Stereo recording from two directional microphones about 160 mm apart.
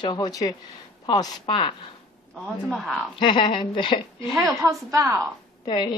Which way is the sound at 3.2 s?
30° left (ahead or behind).